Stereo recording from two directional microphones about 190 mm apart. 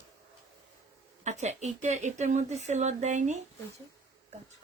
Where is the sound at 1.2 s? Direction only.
35° right (ahead or behind).